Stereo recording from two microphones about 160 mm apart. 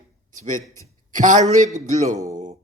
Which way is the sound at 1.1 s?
50° right (ahead or behind).